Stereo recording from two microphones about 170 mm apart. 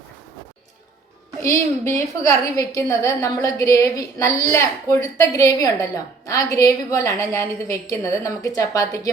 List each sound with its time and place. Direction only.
1.4 s a woman's voice: 15° left (ahead or behind)